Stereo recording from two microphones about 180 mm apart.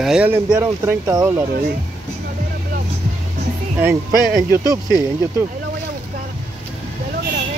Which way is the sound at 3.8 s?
10° right (ahead or behind).